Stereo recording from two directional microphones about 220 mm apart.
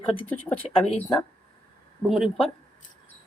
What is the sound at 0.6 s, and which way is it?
Speech, 30° left (ahead or behind).